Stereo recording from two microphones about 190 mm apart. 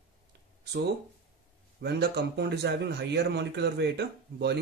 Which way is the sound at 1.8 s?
60° right (ahead or behind).